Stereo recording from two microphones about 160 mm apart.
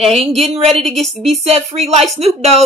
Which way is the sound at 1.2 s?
40° right (ahead or behind).